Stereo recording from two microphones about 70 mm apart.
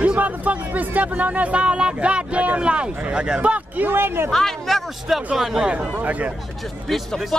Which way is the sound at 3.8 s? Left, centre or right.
Right.